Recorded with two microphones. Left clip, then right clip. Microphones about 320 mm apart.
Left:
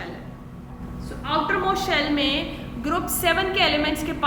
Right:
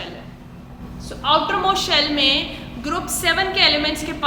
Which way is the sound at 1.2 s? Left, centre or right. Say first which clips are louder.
Right 5 dB; centre.